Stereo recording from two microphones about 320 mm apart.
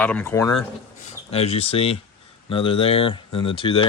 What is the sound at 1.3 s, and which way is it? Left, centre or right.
Speech, centre.